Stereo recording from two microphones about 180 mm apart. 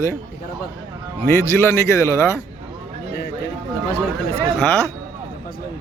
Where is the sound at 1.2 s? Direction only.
15° left (ahead or behind).